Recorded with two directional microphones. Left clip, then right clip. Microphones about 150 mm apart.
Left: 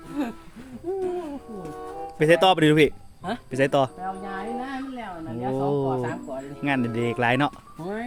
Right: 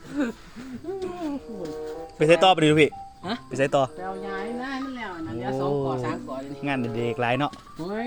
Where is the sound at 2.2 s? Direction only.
30° left (ahead or behind).